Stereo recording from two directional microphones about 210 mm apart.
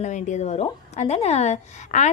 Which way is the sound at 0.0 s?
35° left (ahead or behind).